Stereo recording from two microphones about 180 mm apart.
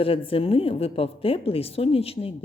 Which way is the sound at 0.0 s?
30° left (ahead or behind).